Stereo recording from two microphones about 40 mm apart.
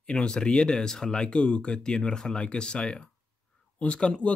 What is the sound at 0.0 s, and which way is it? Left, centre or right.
Speech, left.